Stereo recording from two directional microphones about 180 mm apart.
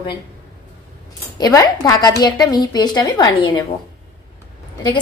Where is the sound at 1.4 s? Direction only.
20° left (ahead or behind).